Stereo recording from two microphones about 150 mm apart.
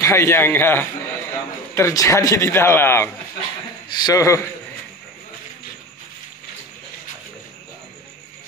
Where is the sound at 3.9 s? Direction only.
25° left (ahead or behind).